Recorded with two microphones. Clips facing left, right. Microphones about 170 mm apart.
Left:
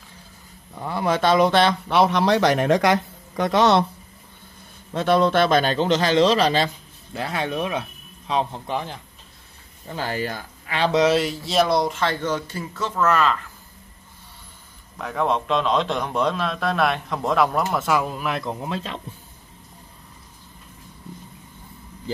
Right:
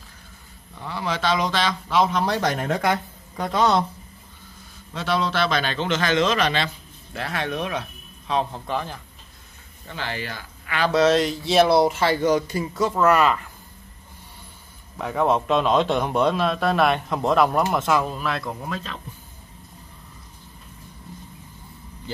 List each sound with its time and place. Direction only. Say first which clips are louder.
0.7 s speech: left 5 dB; 50° left (ahead or behind); by 3.8 s 75° left (ahead or behind)
4.9 s a man's voice: left 6 dB; 50° left (ahead or behind); by 9.0 s 20° left (ahead or behind)
9.8 s speech: left 4 dB; 40° left (ahead or behind)
10.8 s speech: even; 20° left (ahead or behind); by 13.4 s 10° right (ahead or behind)
15.0 s a man's voice: right 2 dB; 5° right (ahead or behind); by 18.9 s 25° left (ahead or behind)